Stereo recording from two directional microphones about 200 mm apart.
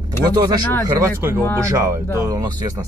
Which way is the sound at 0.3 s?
20° right (ahead or behind).